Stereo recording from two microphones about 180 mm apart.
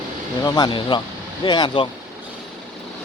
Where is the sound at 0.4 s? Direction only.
25° left (ahead or behind).